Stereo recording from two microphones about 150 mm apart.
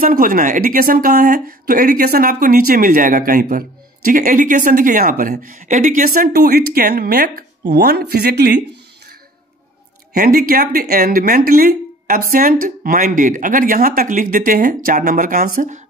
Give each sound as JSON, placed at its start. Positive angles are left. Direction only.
{"t": 0.0, "sound": "speech", "side_deg": -70}
{"t": 10.1, "sound": "speech", "side_deg": -70}